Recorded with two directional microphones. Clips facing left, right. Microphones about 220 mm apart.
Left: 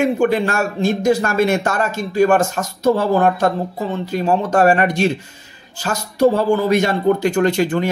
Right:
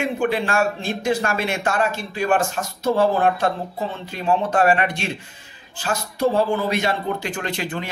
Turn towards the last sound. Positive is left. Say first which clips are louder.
# left 11 dB
turn(degrees=45)  # may be behind; listen again after turning